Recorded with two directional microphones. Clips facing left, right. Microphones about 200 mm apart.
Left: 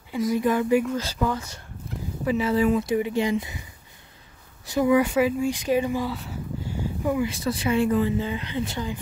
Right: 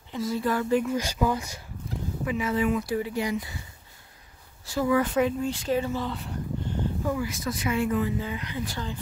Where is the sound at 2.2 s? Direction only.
30° left (ahead or behind).